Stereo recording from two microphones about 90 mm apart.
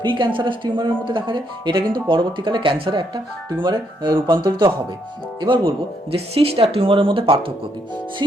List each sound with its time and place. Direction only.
0.0 s speech: 65° right (ahead or behind); by 3.1 s 80° right
3.6 s speech: 55° right (ahead or behind)
5.4 s speech: 75° right (ahead or behind)